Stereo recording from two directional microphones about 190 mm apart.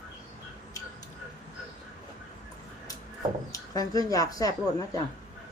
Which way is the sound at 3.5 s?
20° left (ahead or behind).